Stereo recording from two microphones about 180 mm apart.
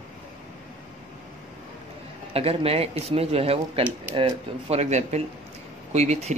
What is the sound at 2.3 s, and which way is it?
Speech, 35° right (ahead or behind).